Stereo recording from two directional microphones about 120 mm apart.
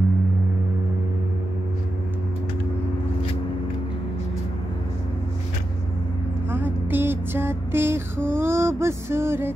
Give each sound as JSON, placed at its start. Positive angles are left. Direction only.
{"t": 6.5, "sound": "female singing", "side_deg": -15}
{"t": 8.4, "sound": "music", "side_deg": -20}